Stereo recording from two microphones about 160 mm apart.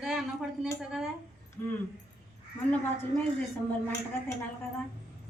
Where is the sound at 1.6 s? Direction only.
15° left (ahead or behind).